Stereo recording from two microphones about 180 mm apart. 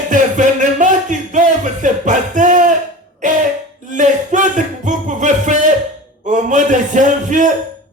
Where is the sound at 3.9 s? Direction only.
45° right (ahead or behind).